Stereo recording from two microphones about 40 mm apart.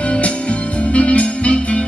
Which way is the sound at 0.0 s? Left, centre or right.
Left.